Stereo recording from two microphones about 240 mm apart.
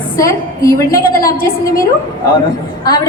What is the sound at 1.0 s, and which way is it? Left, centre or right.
Speech, left.